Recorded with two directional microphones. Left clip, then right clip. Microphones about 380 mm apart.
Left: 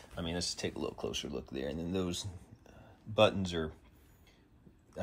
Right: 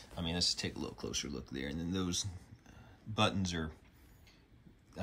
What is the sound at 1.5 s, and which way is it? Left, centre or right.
Speech, right.